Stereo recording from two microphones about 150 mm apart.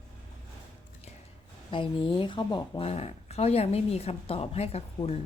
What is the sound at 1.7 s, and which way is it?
Speech, 35° left (ahead or behind).